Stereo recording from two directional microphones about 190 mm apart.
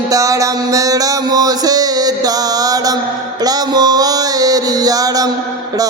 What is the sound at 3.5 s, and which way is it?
Music, 20° right (ahead or behind).